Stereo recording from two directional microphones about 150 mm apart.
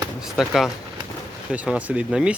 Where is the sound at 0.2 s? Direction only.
Centre (ahead or behind).